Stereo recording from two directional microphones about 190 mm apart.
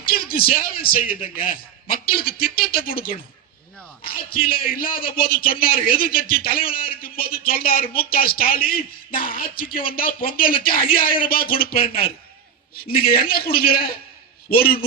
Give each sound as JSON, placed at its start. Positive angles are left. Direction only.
{"t": 0.0, "sound": "a man's voice", "side_deg": 50}